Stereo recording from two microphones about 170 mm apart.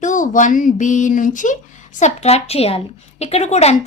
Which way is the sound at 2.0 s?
40° left (ahead or behind).